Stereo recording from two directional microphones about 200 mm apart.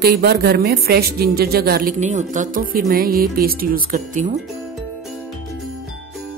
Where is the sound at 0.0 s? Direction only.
50° right (ahead or behind).